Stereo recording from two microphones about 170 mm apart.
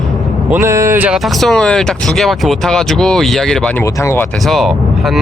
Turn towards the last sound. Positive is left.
turn(degrees=0)  # may be behind; listen again after turning